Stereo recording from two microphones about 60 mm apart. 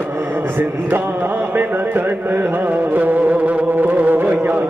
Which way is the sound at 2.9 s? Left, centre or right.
Right.